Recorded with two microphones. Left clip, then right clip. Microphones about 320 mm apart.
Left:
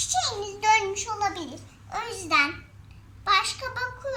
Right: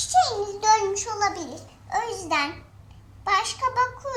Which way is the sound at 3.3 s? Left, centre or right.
Centre.